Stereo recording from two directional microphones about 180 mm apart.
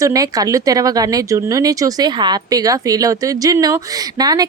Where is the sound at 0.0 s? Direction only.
20° right (ahead or behind).